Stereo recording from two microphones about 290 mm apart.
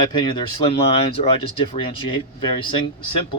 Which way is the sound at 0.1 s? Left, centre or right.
Centre.